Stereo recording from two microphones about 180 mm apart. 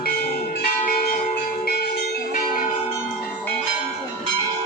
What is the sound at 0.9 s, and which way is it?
Music, 55° left (ahead or behind).